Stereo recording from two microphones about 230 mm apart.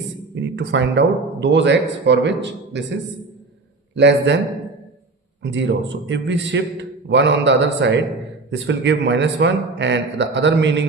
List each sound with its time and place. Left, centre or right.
0.3 s speech: right
3.9 s speech: right
5.4 s speech: right